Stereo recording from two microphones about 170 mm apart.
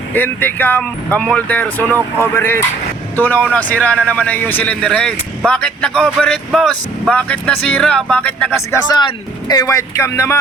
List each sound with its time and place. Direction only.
0.1 s speech: 10° left (ahead or behind)
8.7 s speech: 25° left (ahead or behind)